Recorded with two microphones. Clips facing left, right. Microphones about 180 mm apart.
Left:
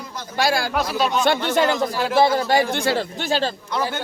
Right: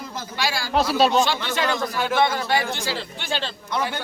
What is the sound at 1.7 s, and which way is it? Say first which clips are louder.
Speech: left 3 dB; 30° left (ahead or behind).